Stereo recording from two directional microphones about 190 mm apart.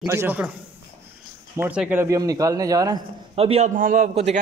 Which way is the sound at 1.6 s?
10° right (ahead or behind).